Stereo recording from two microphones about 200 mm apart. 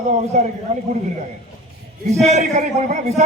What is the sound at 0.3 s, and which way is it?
Speech, 35° right (ahead or behind).